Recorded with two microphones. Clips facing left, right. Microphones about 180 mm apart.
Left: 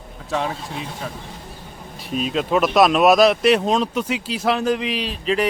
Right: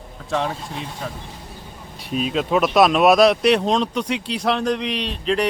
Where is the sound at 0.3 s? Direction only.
Centre (ahead or behind).